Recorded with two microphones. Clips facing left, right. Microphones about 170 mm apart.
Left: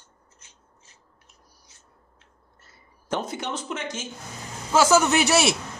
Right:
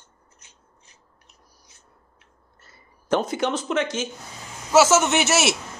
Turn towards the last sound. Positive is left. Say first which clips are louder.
# left 1 dB
turn(degrees=0)  # may be behind; listen again after turning